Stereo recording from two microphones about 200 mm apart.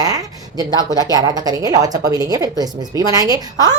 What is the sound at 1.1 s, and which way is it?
A woman's voice, 20° right (ahead or behind).